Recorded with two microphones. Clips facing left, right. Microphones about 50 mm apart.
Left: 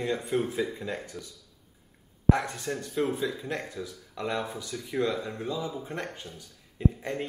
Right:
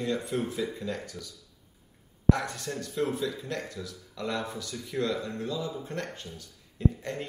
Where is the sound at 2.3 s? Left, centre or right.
Left.